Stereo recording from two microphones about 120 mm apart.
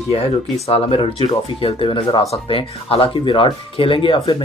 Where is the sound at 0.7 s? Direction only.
50° left (ahead or behind).